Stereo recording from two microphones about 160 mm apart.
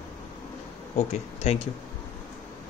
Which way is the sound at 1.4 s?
40° left (ahead or behind).